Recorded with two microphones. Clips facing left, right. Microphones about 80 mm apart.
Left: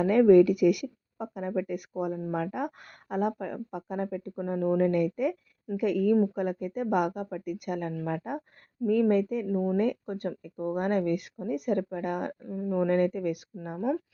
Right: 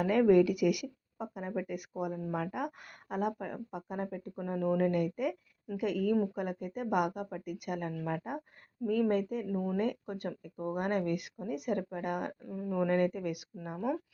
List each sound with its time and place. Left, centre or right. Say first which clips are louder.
0.0 s speech: left 6 dB; left
2.0 s speech: left 5 dB; left
2.3 s speech: left 4 dB; left
9.5 s speech: left 6 dB; centre
9.7 s speech: left 5 dB; left
12.5 s speech: left 5 dB; left
12.9 s speech: left 4 dB; left